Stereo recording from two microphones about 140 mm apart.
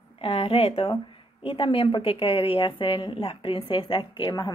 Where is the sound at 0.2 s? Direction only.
45° left (ahead or behind).